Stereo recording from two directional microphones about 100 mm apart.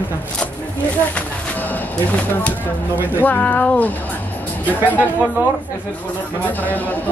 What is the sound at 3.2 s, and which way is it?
Speech, 20° left (ahead or behind).